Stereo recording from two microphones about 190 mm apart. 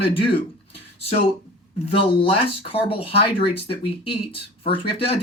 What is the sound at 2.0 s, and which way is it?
Speech, 30° left (ahead or behind).